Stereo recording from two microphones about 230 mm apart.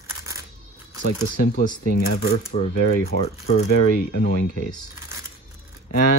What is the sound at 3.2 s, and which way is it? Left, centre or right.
Speech, left.